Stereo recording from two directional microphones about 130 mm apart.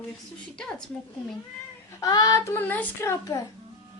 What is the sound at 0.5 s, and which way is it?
Speech, 5° left (ahead or behind).